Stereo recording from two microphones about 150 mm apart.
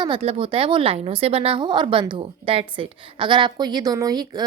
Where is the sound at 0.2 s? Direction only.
40° right (ahead or behind).